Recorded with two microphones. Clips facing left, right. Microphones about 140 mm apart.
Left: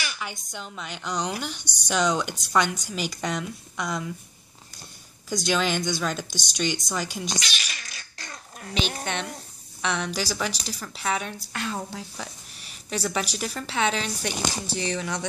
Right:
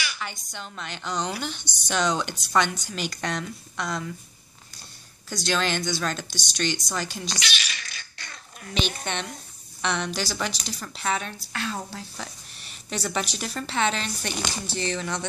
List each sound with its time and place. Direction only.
0.2 s a woman's voice: 10° left (ahead or behind)
5.3 s a woman's voice: 15° left (ahead or behind)
7.3 s a sound: 40° left (ahead or behind)
9.0 s a woman's voice: 5° left (ahead or behind)